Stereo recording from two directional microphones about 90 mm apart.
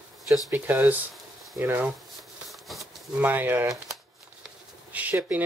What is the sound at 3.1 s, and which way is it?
Speech, 20° right (ahead or behind).